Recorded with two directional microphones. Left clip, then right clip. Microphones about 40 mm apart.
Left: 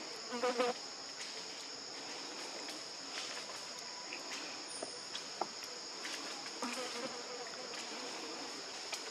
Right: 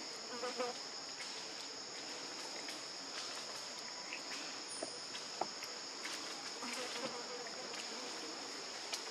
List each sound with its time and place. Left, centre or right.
0.6 s insect: left